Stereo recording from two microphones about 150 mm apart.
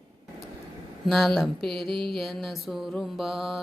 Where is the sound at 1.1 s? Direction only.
Centre (ahead or behind).